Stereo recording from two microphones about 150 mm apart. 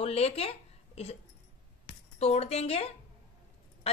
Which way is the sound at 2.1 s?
45° left (ahead or behind).